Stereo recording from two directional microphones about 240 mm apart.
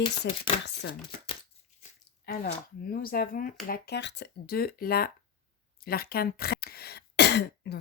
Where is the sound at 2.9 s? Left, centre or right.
Left.